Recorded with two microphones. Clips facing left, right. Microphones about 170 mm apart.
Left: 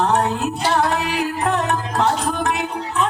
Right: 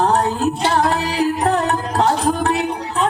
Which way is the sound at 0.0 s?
35° right (ahead or behind).